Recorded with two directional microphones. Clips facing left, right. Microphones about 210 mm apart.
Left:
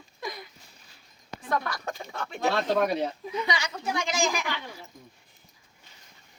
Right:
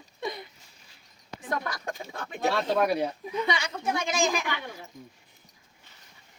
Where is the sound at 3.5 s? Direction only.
20° right (ahead or behind).